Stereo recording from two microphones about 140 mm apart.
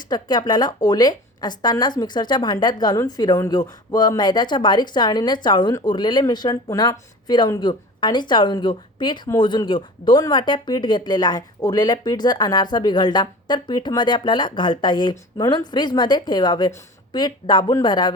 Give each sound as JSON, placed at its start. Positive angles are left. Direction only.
{"t": 0.1, "sound": "speech", "side_deg": 30}